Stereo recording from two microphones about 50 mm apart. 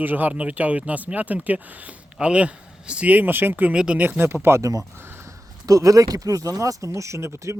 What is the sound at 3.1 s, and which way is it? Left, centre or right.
Speech, right.